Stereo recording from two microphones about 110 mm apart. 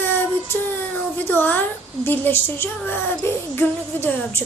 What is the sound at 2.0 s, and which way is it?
Speech, 20° left (ahead or behind).